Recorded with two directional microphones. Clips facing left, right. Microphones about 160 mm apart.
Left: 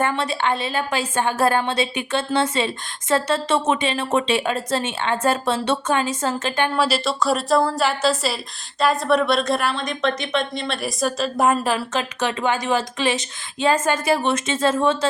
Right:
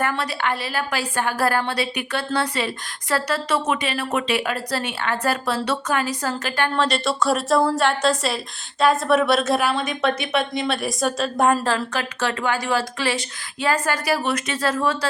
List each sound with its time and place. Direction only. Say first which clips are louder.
0.0 s a woman's voice: left 2 dB; 25° left (ahead or behind)
6.7 s a woman's voice: left 1 dB; 5° left (ahead or behind)
11.6 s a woman's voice: left 1 dB; 15° left (ahead or behind)